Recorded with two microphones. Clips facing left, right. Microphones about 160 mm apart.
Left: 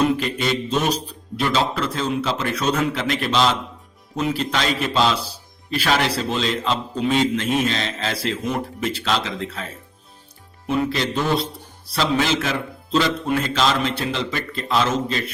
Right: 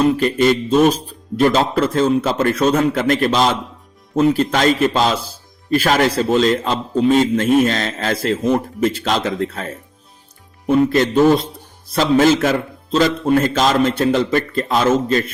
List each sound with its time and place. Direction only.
0.2 s a man's voice: 45° right (ahead or behind)